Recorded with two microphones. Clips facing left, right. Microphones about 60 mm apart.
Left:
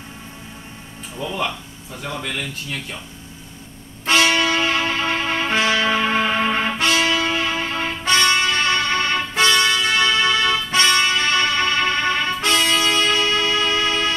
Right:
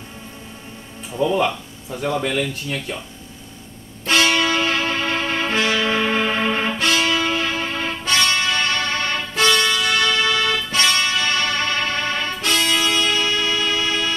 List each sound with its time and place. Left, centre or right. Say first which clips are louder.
2.0 s speech: right 6 dB; centre
4.0 s music: left 1 dB; left
13.0 s music: left 2 dB; left